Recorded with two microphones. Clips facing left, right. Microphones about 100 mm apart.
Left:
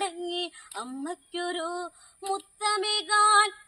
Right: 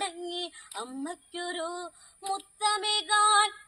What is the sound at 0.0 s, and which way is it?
Female singing, 50° left (ahead or behind).